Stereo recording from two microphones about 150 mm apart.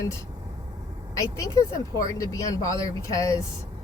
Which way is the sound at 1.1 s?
20° left (ahead or behind).